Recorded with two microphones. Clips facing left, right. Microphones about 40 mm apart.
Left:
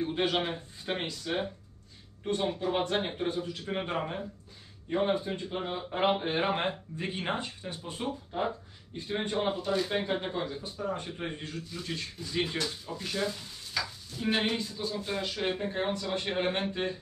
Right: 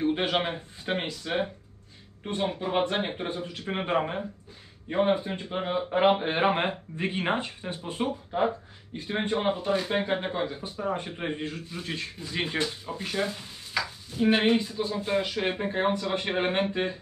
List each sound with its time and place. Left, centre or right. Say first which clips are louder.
0.0 s speech: right 3 dB; centre